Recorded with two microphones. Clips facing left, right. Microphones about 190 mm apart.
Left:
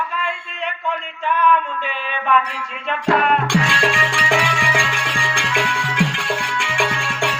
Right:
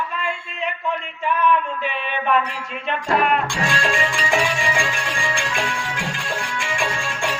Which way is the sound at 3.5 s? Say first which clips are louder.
Left 4 dB; 65° left (ahead or behind).